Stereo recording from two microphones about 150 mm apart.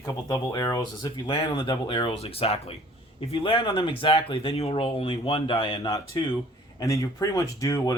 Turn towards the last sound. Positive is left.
turn(degrees=20)  # may be behind; listen again after turning